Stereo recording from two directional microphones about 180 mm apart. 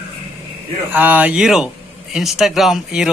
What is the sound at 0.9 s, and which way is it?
Speech, 10° right (ahead or behind).